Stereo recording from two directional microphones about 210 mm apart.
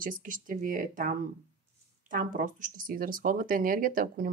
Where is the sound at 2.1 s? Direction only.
40° right (ahead or behind).